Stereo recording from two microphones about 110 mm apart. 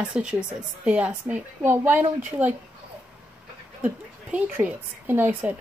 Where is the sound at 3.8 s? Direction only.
15° right (ahead or behind).